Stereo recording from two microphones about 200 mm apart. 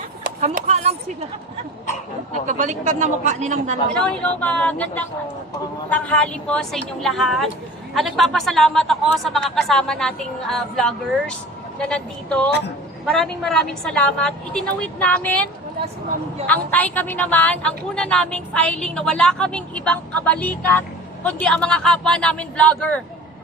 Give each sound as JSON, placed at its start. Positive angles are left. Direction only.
{"t": 0.4, "sound": "speech", "side_deg": -35}
{"t": 2.5, "sound": "speech", "side_deg": -40}
{"t": 4.4, "sound": "a woman's voice", "side_deg": 5}
{"t": 16.5, "sound": "a woman's voice", "side_deg": 10}